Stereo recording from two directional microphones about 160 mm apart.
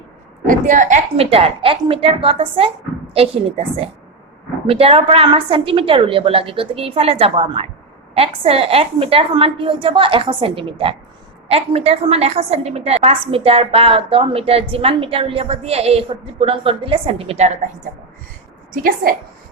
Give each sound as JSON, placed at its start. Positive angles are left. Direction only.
{"t": 0.4, "sound": "a woman's voice", "side_deg": -55}
{"t": 18.7, "sound": "a woman's voice", "side_deg": -65}